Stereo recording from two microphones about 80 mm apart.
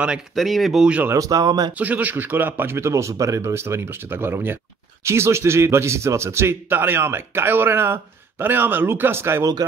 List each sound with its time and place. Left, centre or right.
0.3 s speech: centre
1.1 s speech: right
1.7 s a man's voice: centre